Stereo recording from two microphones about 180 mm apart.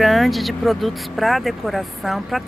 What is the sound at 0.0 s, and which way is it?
Speech, centre (ahead or behind).